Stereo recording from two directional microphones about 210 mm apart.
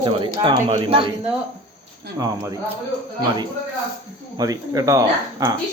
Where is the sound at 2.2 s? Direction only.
15° right (ahead or behind).